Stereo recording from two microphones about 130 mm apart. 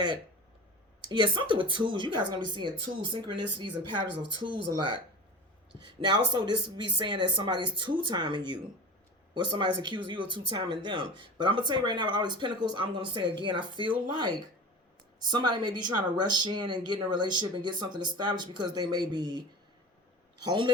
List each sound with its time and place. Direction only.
1.0 s speech: 40° right (ahead or behind)